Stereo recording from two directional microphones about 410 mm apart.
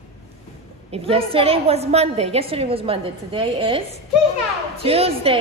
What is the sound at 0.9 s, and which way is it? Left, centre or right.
A woman's voice, centre.